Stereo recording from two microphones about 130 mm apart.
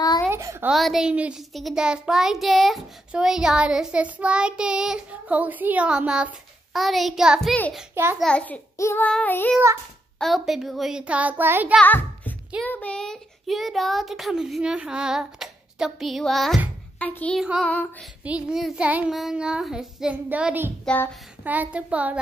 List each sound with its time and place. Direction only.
0.3 s a child's voice: 20° right (ahead or behind)
0.7 s a child's voice: centre (ahead or behind)
7.9 s a child's voice: 20° right (ahead or behind)
8.2 s child singing: 10° left (ahead or behind)
8.7 s child singing: 20° left (ahead or behind)
9.0 s child singing: 10° left (ahead or behind)
10.1 s a child's voice: centre (ahead or behind)
11.8 s a sound: 15° left (ahead or behind)
12.6 s a child's voice: 10° left (ahead or behind)
17.0 s child singing: 10° left (ahead or behind)
17.4 s a child's voice: 5° right (ahead or behind)
18.2 s child singing: 5° right (ahead or behind)
20.8 s child singing: 10° left (ahead or behind)
21.5 s child singing: 10° right (ahead or behind)